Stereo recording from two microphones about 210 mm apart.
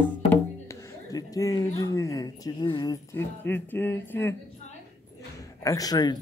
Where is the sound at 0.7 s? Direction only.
15° left (ahead or behind).